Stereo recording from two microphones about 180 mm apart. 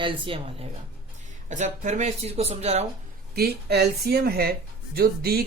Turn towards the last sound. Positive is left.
turn(degrees=-60)  # may be behind; listen again after turning